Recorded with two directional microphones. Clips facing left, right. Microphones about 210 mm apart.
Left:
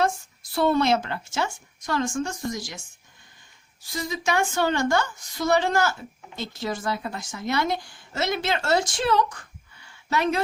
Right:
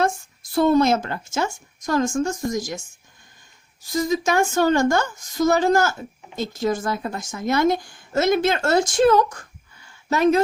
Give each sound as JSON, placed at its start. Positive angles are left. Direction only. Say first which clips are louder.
{"t": 0.5, "sound": "speech", "louder": "right 4 dB", "side_deg": -45}
{"t": 3.8, "sound": "speech", "louder": "right 7 dB", "side_deg": -45}